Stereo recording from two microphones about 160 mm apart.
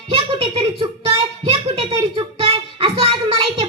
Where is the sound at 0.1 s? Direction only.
35° right (ahead or behind).